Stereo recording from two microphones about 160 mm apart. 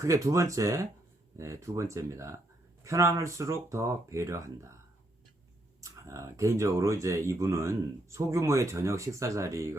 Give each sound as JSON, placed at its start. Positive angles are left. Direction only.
{"t": 0.0, "sound": "speech", "side_deg": -20}
{"t": 5.8, "sound": "speech", "side_deg": -20}